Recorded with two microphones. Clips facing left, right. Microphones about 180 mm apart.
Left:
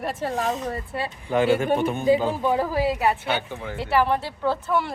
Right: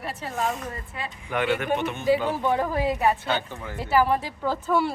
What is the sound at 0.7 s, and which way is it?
Speech, 30° left (ahead or behind).